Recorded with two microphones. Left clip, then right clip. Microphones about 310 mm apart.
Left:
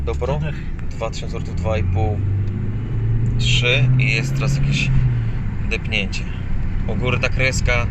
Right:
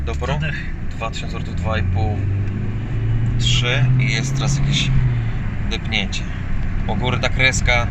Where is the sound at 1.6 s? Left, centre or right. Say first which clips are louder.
Left 1 dB; centre.